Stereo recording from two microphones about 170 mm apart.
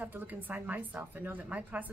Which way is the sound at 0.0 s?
10° right (ahead or behind).